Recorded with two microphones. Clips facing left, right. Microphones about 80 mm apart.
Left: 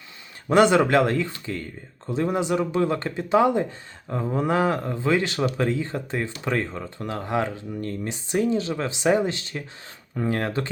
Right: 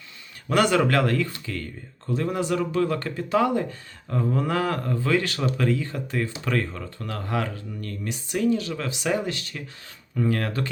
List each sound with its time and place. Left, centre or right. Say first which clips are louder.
0.4 s speech: left 3 dB; left